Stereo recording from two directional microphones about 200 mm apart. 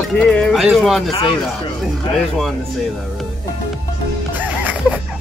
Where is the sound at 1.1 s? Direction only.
25° left (ahead or behind).